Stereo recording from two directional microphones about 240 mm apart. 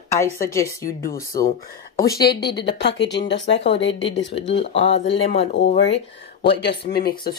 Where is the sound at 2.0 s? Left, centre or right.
Left.